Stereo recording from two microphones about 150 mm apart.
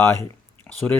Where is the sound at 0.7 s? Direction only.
10° left (ahead or behind).